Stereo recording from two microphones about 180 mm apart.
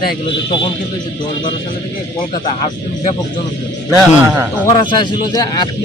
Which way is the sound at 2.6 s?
40° left (ahead or behind).